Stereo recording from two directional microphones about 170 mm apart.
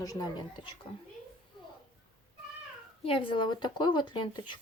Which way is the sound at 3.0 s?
30° left (ahead or behind).